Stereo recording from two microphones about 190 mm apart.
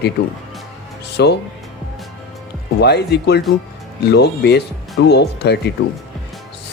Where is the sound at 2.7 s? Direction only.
60° left (ahead or behind).